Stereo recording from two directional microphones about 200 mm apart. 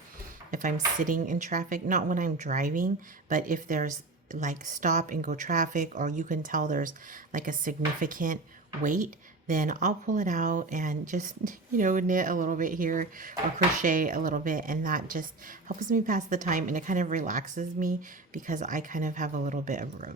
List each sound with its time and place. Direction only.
0.5 s a woman's voice: 40° right (ahead or behind)